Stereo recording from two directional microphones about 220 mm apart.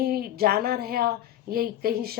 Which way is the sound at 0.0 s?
45° right (ahead or behind).